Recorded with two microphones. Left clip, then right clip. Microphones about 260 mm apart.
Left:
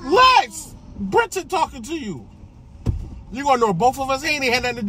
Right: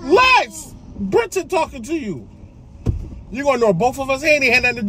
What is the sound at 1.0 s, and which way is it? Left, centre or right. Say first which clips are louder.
Speech: right 1 dB; centre.